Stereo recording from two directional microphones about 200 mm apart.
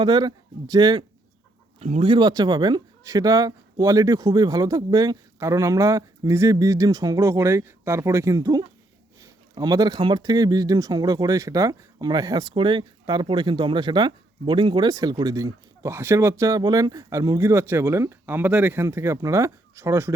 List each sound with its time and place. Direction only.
0.0 s speech: 20° right (ahead or behind)